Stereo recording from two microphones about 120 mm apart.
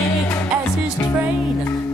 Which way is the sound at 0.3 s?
20° left (ahead or behind).